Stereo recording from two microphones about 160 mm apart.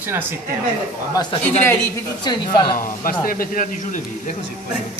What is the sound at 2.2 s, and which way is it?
Speech, 30° left (ahead or behind).